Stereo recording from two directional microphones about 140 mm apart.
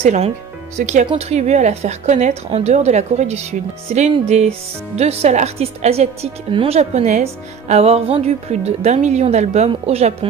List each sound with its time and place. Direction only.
0.0 s a woman's voice: 50° right (ahead or behind)